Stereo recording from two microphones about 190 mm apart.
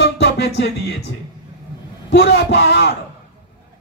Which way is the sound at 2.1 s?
65° left (ahead or behind).